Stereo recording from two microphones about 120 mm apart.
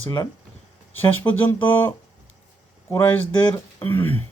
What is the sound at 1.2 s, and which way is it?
Speech, 40° left (ahead or behind).